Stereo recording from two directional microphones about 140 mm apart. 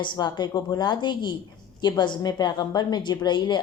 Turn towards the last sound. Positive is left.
turn(degrees=30)  # may be behind; listen again after turning